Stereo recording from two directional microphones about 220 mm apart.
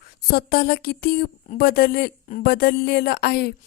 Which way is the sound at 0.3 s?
45° left (ahead or behind).